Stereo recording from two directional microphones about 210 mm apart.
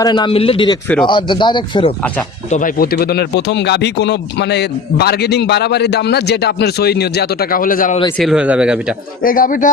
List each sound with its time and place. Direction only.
0.0 s speech: 20° left (ahead or behind)
2.0 s speech: 5° left (ahead or behind)
2.5 s speech: 40° left (ahead or behind)
8.2 s speech: 5° right (ahead or behind)
9.2 s speech: 40° left (ahead or behind)